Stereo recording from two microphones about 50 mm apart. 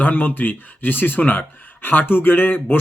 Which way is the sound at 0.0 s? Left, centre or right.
Left.